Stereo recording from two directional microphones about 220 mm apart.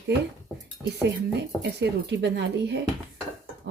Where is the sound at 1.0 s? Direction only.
50° right (ahead or behind).